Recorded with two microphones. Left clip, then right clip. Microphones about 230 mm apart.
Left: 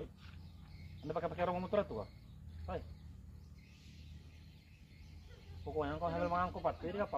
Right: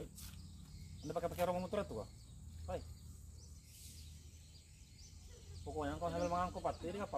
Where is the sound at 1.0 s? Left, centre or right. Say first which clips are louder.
Left 1 dB; left.